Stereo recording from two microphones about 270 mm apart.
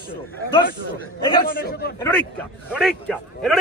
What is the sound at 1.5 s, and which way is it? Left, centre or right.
Speech, left.